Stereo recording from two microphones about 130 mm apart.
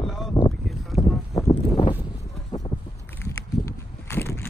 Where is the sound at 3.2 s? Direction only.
20° left (ahead or behind).